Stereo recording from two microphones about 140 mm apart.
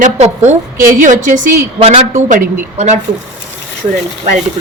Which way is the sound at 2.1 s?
60° right (ahead or behind).